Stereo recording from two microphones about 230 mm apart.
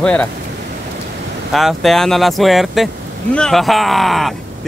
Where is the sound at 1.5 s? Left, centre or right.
Centre.